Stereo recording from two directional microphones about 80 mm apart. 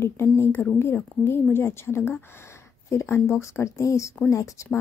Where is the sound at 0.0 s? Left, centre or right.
Left.